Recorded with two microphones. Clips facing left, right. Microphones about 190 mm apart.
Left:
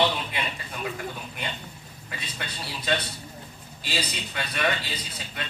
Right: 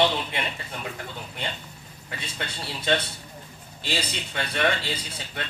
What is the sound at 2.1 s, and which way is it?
Speech, 25° right (ahead or behind).